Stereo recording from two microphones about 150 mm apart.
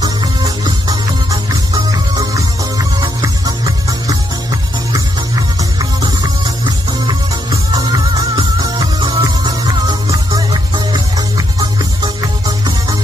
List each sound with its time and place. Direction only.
0.8 s music: 25° right (ahead or behind)
10.9 s music: 25° right (ahead or behind)